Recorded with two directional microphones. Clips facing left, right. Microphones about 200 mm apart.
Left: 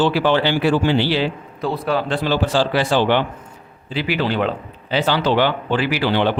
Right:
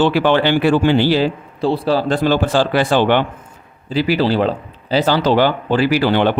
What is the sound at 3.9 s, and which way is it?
Speech, 40° right (ahead or behind).